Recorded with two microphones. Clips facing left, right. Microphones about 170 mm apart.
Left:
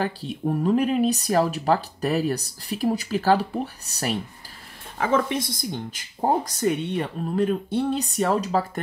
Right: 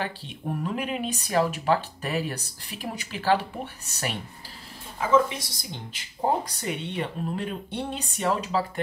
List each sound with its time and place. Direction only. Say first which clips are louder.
0.0 s speech: left 6 dB; 40° left (ahead or behind)
4.9 s speech: even; 60° left (ahead or behind); by 8.6 s 45° left (ahead or behind)